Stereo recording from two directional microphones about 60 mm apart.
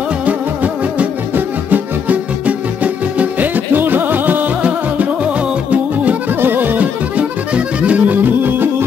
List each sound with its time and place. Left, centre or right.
0.2 s music: right
6.4 s accordion: right